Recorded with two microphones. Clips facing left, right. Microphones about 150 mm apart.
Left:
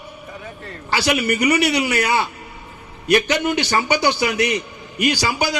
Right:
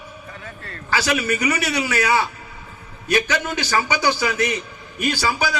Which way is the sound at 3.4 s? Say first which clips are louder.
Left 3 dB; 65° left (ahead or behind).